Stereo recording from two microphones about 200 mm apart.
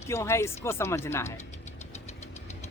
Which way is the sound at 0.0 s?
15° left (ahead or behind).